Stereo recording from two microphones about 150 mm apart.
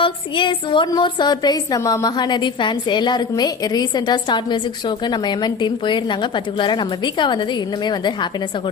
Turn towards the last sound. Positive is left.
turn(degrees=30)  # may be behind; listen again after turning